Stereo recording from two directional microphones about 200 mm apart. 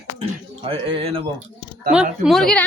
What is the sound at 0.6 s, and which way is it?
Music, 30° right (ahead or behind).